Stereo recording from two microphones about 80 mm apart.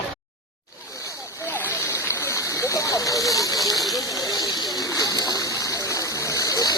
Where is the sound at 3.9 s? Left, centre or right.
Left.